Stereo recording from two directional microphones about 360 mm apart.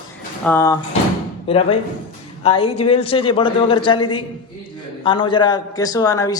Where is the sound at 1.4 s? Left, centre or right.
Centre.